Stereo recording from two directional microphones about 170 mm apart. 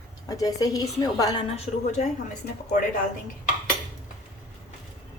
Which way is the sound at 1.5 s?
35° left (ahead or behind).